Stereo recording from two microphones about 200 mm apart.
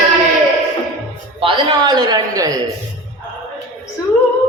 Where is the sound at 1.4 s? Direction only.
25° right (ahead or behind).